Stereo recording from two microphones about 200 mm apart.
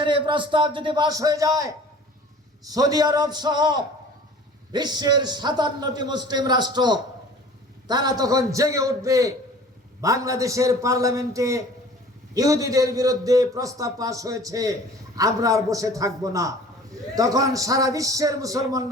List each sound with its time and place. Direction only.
0.0 s a man's voice: 25° right (ahead or behind)